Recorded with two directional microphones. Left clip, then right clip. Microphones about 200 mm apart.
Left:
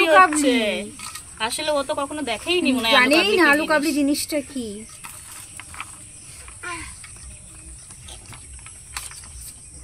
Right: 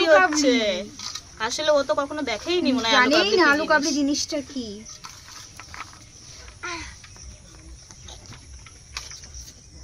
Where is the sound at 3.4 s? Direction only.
35° left (ahead or behind).